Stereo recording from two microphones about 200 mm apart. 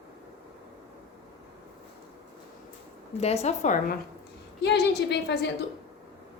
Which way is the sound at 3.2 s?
30° left (ahead or behind).